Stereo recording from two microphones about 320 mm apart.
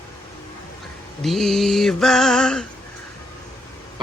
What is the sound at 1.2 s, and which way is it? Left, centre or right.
Mantra, centre.